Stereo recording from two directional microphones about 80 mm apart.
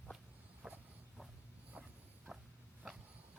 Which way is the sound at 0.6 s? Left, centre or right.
Centre.